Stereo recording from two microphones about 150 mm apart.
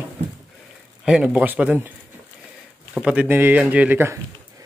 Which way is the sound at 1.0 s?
5° right (ahead or behind).